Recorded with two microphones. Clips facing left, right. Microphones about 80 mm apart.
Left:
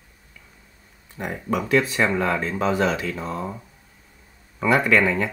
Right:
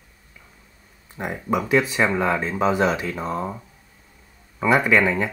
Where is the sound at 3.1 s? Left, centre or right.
Right.